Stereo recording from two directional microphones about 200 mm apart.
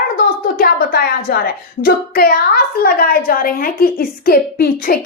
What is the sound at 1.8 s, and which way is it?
A woman's voice, 45° left (ahead or behind).